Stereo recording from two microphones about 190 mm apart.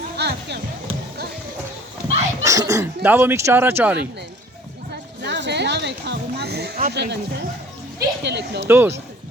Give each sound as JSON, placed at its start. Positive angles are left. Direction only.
{"t": 0.2, "sound": "music", "side_deg": -60}
{"t": 2.4, "sound": "speech", "side_deg": -15}
{"t": 5.2, "sound": "a sound", "side_deg": -65}
{"t": 6.8, "sound": "speech", "side_deg": -60}
{"t": 7.9, "sound": "a sound", "side_deg": -65}
{"t": 8.6, "sound": "speech", "side_deg": -10}